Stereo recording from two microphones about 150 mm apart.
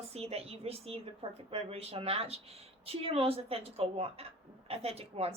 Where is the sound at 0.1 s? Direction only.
45° right (ahead or behind).